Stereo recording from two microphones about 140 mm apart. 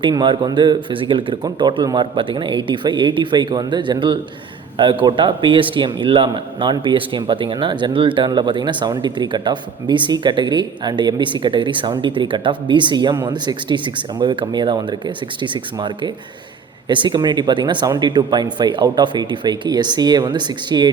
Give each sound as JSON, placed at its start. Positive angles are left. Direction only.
{"t": 0.0, "sound": "a man's voice", "side_deg": -30}